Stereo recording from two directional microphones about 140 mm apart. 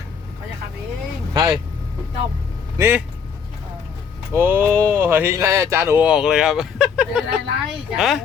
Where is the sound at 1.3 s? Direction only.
30° right (ahead or behind).